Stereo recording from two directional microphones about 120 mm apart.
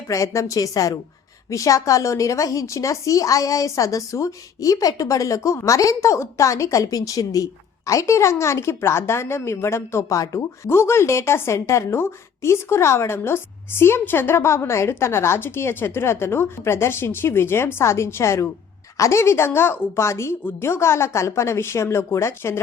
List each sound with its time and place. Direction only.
0.1 s a woman's voice: 25° left (ahead or behind)